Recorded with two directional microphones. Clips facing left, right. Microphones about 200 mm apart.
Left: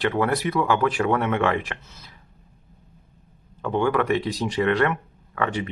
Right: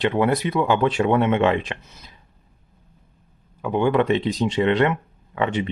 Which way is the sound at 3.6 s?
15° right (ahead or behind).